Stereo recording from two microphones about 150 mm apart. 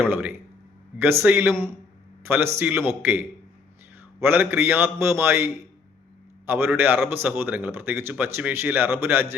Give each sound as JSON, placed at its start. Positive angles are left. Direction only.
{"t": 0.0, "sound": "a man's voice", "side_deg": -15}
{"t": 6.4, "sound": "a sound", "side_deg": -15}
{"t": 6.7, "sound": "a man's voice", "side_deg": -15}